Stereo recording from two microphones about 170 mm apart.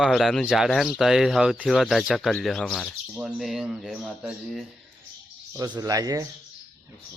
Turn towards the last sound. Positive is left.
turn(degrees=-20)  # may be behind; listen again after turning